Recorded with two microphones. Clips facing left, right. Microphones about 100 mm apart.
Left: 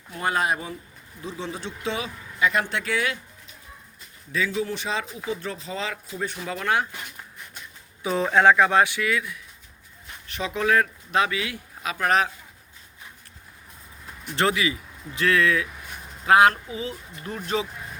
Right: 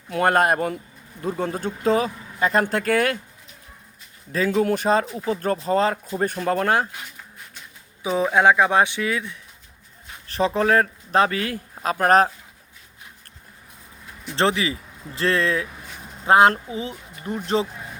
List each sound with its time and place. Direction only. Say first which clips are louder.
0.1 s speech: right 6 dB; 60° right (ahead or behind)
4.3 s speech: right 6 dB; 45° right (ahead or behind)
8.0 s speech: right 1 dB; 10° right (ahead or behind); by 12.3 s 40° right (ahead or behind)
14.3 s speech: right 2 dB; 30° right (ahead or behind)